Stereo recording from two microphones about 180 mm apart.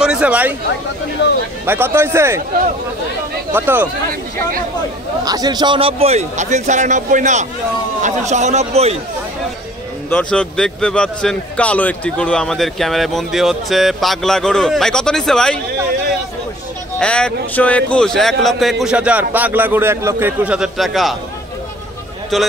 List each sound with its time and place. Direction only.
0.0 s speech: 5° right (ahead or behind)
1.7 s speech: 10° right (ahead or behind)
3.5 s speech: 10° right (ahead or behind)
5.2 s a man's voice: 20° right (ahead or behind); by 8.9 s 35° right (ahead or behind)
10.0 s a man's voice: 5° left (ahead or behind)
17.0 s a man's voice: 5° left (ahead or behind)
22.3 s a man's voice: centre (ahead or behind)